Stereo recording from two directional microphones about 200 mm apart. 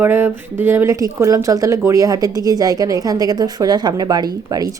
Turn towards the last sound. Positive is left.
turn(degrees=-20)  # may be behind; listen again after turning